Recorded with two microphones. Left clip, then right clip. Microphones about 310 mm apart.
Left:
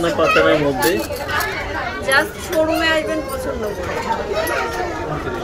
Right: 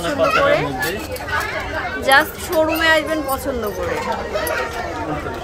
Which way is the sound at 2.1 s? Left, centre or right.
Centre.